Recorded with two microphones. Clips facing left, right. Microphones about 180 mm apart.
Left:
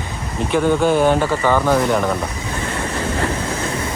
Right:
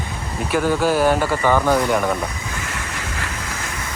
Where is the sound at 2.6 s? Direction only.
30° left (ahead or behind).